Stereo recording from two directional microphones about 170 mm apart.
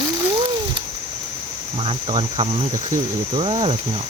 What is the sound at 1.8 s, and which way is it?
Speech, 35° right (ahead or behind).